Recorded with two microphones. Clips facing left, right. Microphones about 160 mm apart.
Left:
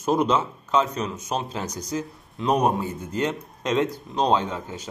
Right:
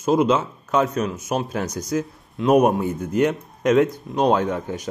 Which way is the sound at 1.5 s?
15° left (ahead or behind).